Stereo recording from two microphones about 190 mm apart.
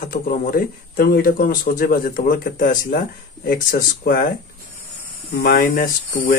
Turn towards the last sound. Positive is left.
turn(degrees=45)  # may be behind; listen again after turning